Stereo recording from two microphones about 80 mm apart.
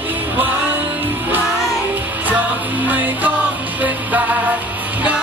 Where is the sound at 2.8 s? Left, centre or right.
Right.